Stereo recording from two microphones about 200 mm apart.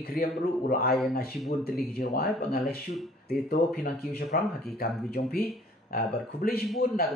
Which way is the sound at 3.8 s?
50° left (ahead or behind).